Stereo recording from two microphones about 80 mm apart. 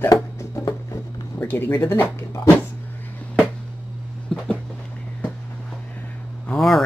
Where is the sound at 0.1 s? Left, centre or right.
Left.